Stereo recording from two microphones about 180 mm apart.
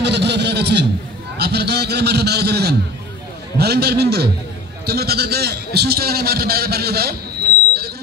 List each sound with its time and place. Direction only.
0.0 s a man's voice: 70° right (ahead or behind)